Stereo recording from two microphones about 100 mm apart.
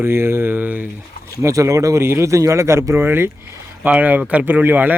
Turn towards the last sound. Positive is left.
turn(degrees=-15)  # may be behind; listen again after turning